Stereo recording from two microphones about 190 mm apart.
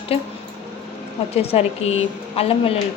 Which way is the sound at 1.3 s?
30° left (ahead or behind).